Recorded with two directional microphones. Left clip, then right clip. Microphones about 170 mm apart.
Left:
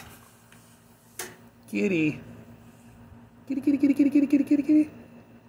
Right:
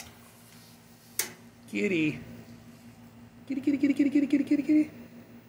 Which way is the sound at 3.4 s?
20° left (ahead or behind).